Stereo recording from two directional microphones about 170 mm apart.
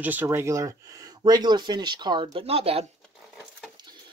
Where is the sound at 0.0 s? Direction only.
10° right (ahead or behind); by 2.9 s 35° right (ahead or behind).